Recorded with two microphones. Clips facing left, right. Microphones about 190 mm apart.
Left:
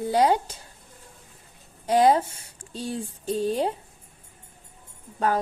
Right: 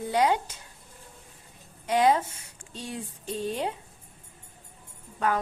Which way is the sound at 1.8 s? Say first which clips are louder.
Left 3 dB; 35° left (ahead or behind).